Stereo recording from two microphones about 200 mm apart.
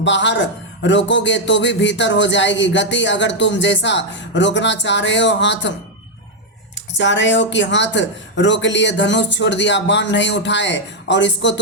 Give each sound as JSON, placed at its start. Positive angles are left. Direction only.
{"t": 0.0, "sound": "a man's voice", "side_deg": 65}
{"t": 6.9, "sound": "a man's voice", "side_deg": 65}